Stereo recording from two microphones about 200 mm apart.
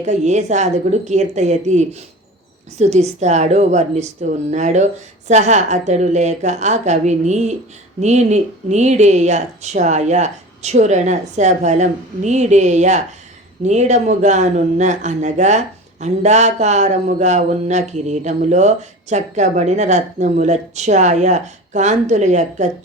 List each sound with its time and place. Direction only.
0.0 s speech: 35° right (ahead or behind)